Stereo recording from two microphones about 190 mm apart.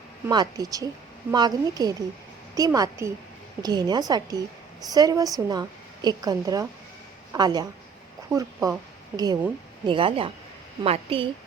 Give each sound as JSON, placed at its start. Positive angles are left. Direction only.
{"t": 0.3, "sound": "a woman's voice", "side_deg": -20}